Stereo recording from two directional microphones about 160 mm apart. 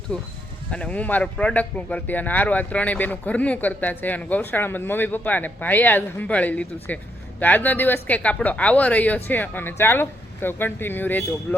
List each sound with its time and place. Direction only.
0.1 s speech: 5° left (ahead or behind)